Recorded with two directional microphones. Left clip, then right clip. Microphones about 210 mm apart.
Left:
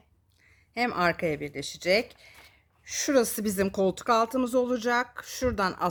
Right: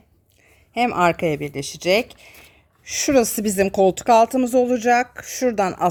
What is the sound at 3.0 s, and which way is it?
A woman's voice, 20° right (ahead or behind).